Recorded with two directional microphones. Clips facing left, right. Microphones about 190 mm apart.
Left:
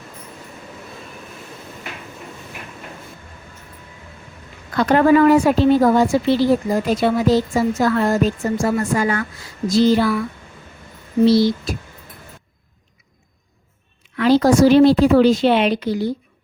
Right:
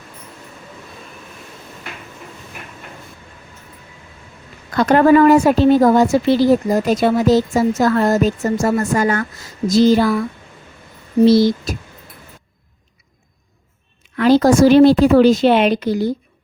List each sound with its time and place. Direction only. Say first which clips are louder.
4.8 s speech: right 2 dB; 45° right (ahead or behind)
11.3 s speech: right 2 dB; 45° right (ahead or behind)
14.2 s speech: right 2 dB; 45° right (ahead or behind)